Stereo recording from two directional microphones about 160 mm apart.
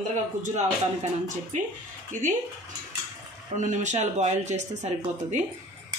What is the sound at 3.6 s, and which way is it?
A woman's voice, 50° right (ahead or behind).